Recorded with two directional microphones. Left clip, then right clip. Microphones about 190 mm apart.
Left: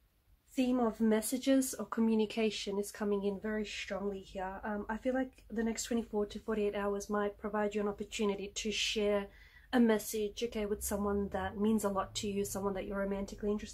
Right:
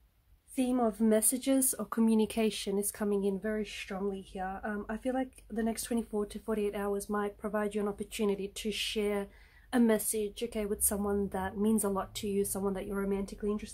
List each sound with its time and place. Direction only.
0.6 s speech: 40° right (ahead or behind)